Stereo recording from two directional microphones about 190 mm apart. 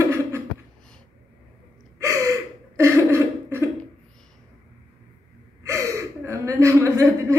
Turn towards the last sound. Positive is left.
turn(degrees=-15)  # may be behind; listen again after turning